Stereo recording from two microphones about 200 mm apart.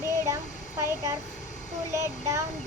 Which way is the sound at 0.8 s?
15° right (ahead or behind).